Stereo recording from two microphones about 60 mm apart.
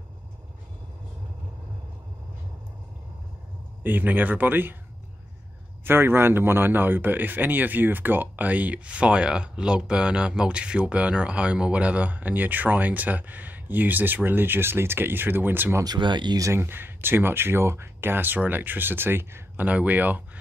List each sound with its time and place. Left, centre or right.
3.8 s speech: right
5.9 s a man's voice: right
19.6 s a man's voice: right